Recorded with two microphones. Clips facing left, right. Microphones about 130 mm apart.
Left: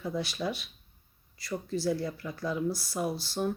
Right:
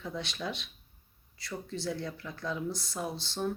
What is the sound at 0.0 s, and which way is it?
Speech, 5° left (ahead or behind).